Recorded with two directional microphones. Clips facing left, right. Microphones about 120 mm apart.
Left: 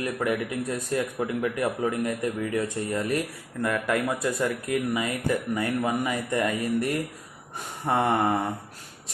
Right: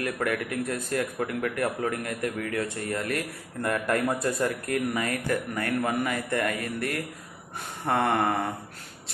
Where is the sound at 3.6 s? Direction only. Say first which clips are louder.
Even; 5° left (ahead or behind).